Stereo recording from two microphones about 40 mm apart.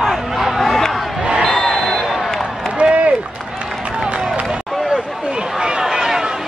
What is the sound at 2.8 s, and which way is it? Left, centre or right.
Run, right.